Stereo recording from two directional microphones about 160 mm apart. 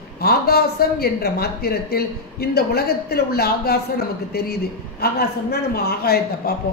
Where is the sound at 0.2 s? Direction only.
75° left (ahead or behind).